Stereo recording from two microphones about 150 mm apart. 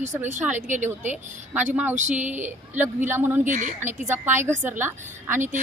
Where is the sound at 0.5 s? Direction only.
55° right (ahead or behind).